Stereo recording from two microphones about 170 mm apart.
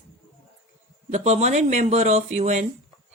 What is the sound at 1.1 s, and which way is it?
Speech, 40° right (ahead or behind).